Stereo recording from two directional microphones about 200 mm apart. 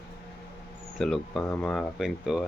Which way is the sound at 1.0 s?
Centre (ahead or behind).